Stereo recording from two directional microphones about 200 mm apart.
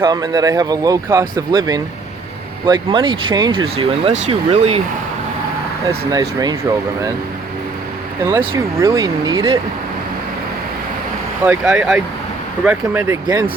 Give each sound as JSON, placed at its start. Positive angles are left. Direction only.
{"t": 0.0, "sound": "speech", "side_deg": -20}
{"t": 5.9, "sound": "speech", "side_deg": -20}
{"t": 8.3, "sound": "speech", "side_deg": -15}
{"t": 11.4, "sound": "speech", "side_deg": -5}